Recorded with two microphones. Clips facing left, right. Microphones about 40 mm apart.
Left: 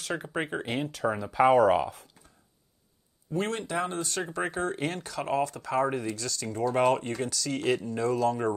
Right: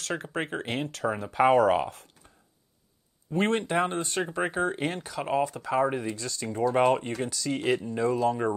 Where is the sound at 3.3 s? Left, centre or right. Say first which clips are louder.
Right 4 dB; right.